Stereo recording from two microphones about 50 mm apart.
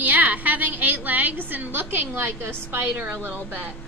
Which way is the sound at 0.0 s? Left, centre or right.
Right.